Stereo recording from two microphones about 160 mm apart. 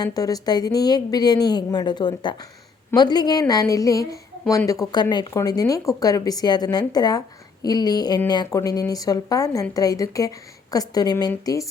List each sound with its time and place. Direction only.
0.0 s a woman's voice: 25° left (ahead or behind)